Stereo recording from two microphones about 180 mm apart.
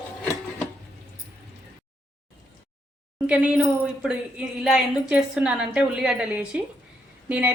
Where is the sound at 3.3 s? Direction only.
5° right (ahead or behind).